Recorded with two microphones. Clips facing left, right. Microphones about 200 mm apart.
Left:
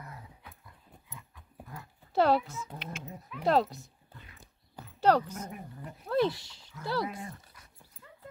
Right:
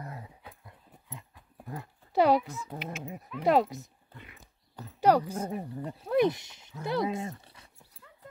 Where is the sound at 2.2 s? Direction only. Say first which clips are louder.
Right 2 dB; 15° right (ahead or behind).